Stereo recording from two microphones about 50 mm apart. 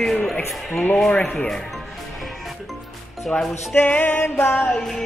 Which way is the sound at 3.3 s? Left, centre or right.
Centre.